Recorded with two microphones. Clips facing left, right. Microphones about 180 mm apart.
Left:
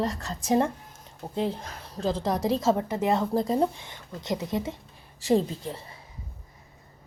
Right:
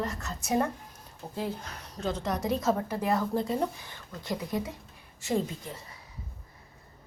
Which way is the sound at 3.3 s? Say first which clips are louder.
Left 5 dB; 40° left (ahead or behind).